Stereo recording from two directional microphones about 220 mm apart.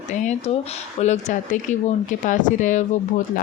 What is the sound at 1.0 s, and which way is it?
Speech, 35° left (ahead or behind).